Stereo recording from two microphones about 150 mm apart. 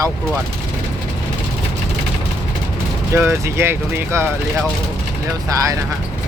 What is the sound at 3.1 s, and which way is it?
Speech, 15° right (ahead or behind).